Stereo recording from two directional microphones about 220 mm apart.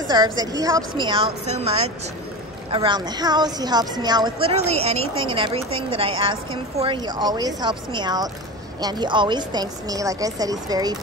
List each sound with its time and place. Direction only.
0.1 s a woman's voice: 20° right (ahead or behind)